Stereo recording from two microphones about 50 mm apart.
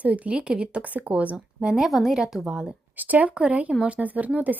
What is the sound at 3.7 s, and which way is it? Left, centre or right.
Speech, centre.